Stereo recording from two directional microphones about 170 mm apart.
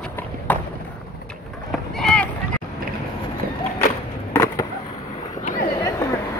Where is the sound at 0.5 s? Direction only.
10° left (ahead or behind).